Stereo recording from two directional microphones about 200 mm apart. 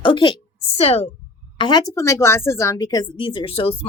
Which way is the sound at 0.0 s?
25° left (ahead or behind).